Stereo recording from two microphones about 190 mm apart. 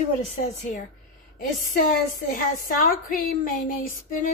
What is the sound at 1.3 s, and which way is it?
A woman's voice, 45° left (ahead or behind).